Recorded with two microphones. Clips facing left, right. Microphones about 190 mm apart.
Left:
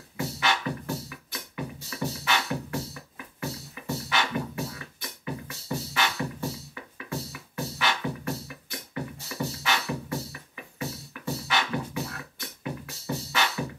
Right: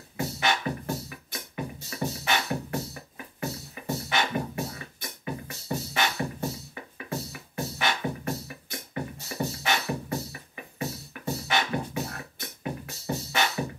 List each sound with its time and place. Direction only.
0.2 s music: 50° right (ahead or behind)